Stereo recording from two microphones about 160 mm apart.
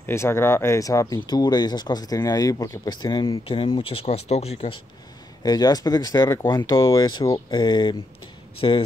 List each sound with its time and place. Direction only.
0.0 s speech: 15° left (ahead or behind); by 4.7 s 40° left (ahead or behind)
5.4 s speech: 25° left (ahead or behind)